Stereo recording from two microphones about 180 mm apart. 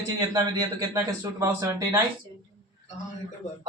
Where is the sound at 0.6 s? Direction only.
15° right (ahead or behind).